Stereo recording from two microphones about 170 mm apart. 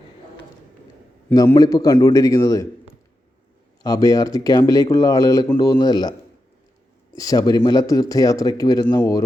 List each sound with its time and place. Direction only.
1.3 s speech: 20° left (ahead or behind)
3.8 s speech: 20° left (ahead or behind)
7.2 s speech: 20° left (ahead or behind)